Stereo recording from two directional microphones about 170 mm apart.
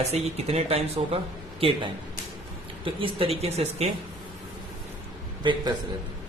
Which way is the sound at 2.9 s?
30° right (ahead or behind).